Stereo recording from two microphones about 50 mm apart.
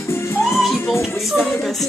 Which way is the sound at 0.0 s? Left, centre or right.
Left.